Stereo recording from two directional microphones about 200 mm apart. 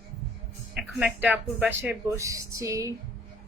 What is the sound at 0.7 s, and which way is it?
Speech, 5° right (ahead or behind).